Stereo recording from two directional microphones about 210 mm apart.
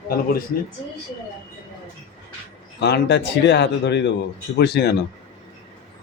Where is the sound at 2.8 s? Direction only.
55° left (ahead or behind).